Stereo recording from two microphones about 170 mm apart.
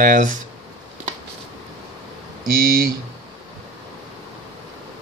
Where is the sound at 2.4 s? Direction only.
60° right (ahead or behind).